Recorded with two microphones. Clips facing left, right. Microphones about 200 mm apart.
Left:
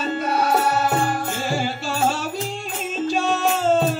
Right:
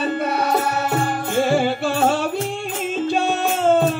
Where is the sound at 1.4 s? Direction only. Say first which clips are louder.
Right 7 dB; 60° right (ahead or behind).